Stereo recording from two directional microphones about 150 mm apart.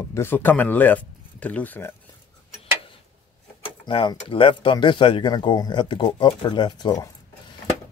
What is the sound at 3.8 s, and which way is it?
Speech, 35° left (ahead or behind).